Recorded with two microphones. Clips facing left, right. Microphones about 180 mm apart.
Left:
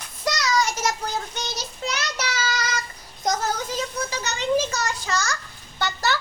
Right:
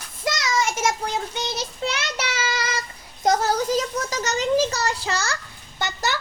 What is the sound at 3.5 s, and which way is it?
A child's voice, 40° right (ahead or behind).